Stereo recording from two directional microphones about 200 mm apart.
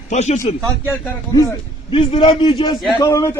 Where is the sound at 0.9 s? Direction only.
15° left (ahead or behind).